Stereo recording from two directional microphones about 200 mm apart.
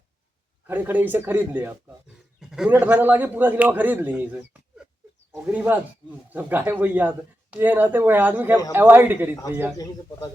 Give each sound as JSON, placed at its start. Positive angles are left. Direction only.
{"t": 0.7, "sound": "speech", "side_deg": -10}
{"t": 9.7, "sound": "a man's voice", "side_deg": 20}